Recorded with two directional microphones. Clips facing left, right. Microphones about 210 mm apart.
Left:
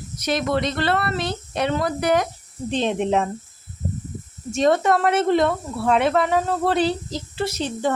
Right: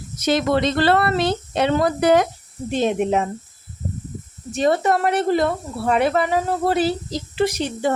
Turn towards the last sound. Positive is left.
turn(degrees=-15)  # may be behind; listen again after turning